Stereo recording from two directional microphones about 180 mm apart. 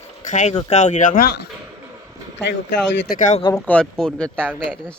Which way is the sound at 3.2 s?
45° left (ahead or behind).